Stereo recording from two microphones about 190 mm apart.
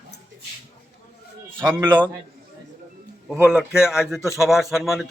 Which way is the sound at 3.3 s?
10° right (ahead or behind).